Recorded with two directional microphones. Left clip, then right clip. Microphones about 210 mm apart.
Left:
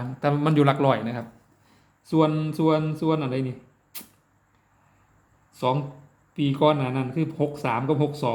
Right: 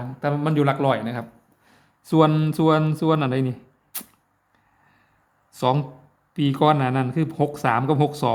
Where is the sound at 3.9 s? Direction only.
35° right (ahead or behind).